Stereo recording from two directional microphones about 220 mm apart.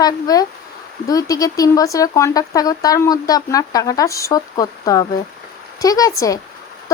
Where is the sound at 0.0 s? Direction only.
15° left (ahead or behind).